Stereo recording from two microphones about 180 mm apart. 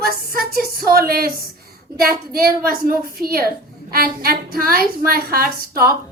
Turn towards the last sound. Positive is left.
turn(degrees=-55)  # may be behind; listen again after turning